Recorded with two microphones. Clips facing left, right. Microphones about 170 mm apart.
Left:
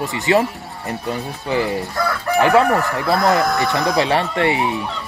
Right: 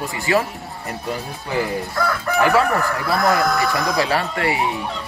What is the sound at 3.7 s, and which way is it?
Speech, 25° left (ahead or behind).